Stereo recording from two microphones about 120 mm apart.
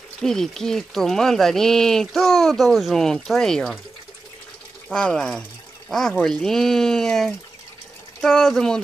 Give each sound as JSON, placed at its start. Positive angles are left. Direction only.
{"t": 0.2, "sound": "speech", "side_deg": 5}
{"t": 4.8, "sound": "speech", "side_deg": 10}